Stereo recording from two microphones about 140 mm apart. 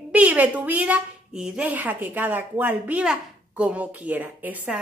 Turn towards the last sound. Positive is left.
turn(degrees=-10)  # may be behind; listen again after turning